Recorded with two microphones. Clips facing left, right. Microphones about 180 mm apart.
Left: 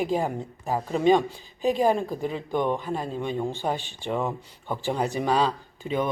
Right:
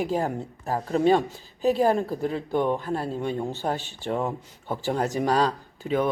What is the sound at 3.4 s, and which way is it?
Speech, 5° right (ahead or behind).